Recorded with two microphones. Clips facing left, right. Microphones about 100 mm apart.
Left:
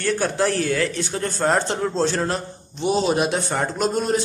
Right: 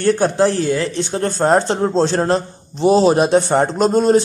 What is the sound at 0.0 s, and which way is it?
A man's voice, 30° right (ahead or behind).